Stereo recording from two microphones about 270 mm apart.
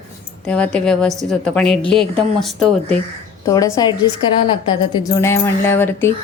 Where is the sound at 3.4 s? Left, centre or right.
Centre.